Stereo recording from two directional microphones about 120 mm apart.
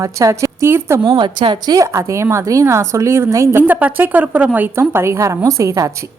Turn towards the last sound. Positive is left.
turn(degrees=-25)  # may be behind; listen again after turning